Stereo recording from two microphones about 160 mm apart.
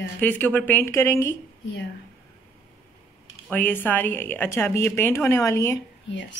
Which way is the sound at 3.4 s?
10° left (ahead or behind).